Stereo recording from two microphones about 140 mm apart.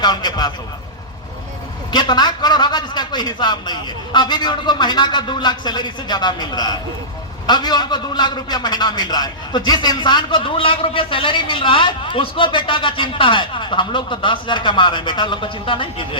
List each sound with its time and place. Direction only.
0.0 s a man's voice: 30° left (ahead or behind)
1.9 s a man's voice: 30° left (ahead or behind)